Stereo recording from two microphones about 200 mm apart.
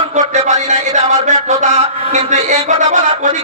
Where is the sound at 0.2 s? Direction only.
35° right (ahead or behind).